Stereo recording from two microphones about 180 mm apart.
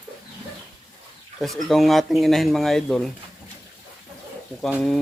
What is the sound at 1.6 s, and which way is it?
Speech, centre (ahead or behind).